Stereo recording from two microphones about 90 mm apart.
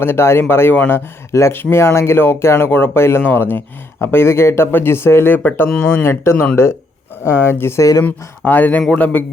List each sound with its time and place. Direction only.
0.0 s a man's voice: 25° left (ahead or behind)